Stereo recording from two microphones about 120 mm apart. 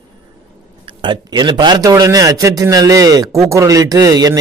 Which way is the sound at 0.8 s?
40° right (ahead or behind).